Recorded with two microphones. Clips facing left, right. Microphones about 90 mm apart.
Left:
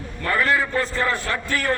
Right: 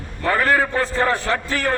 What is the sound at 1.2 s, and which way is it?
Speech, 30° right (ahead or behind).